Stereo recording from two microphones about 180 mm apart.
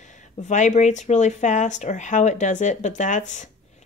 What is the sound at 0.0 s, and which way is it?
Speech, 40° left (ahead or behind).